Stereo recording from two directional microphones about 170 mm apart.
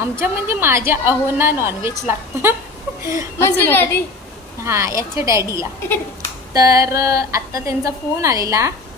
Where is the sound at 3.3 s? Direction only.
15° left (ahead or behind).